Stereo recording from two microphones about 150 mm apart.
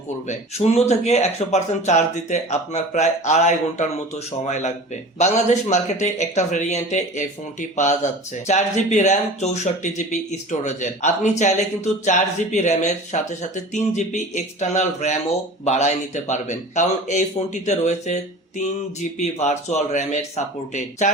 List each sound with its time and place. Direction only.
0.3 s speech: 45° left (ahead or behind)
8.4 s speech: 50° left (ahead or behind)